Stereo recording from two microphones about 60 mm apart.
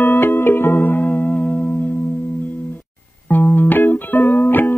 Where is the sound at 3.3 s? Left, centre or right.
Left.